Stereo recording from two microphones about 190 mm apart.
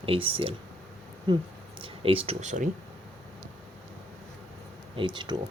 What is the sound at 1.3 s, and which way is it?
Speech, 25° right (ahead or behind).